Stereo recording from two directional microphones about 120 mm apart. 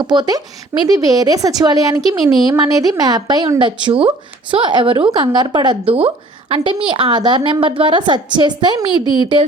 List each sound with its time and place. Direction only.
0.0 s a woman's voice: 35° right (ahead or behind)